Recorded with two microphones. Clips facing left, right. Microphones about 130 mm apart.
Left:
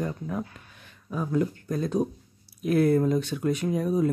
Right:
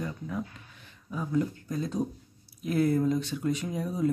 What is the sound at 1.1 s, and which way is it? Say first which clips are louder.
Speech: left 3 dB; 60° left (ahead or behind).